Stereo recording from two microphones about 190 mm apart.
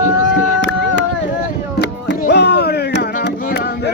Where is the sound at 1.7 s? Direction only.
60° left (ahead or behind).